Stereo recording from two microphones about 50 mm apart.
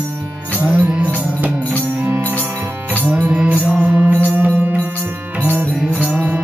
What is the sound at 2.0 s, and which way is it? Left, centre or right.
Music, right.